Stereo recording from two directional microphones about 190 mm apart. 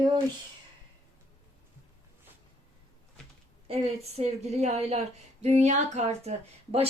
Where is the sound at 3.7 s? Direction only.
30° right (ahead or behind).